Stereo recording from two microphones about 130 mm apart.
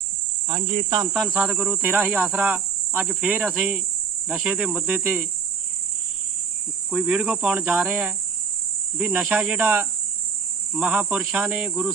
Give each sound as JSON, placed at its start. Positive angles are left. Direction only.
{"t": 0.4, "sound": "cricket", "side_deg": -35}
{"t": 1.3, "sound": "cricket", "side_deg": -15}
{"t": 6.9, "sound": "cricket", "side_deg": -5}